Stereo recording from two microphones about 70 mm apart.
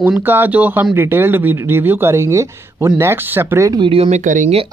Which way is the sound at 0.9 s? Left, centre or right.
Right.